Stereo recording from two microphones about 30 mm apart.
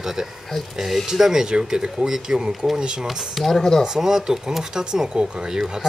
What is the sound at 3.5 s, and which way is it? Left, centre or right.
Speech, centre.